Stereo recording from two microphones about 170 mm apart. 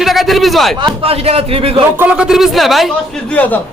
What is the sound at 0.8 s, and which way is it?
Speech, 30° right (ahead or behind).